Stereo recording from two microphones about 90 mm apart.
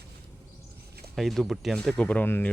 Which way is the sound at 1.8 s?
10° left (ahead or behind).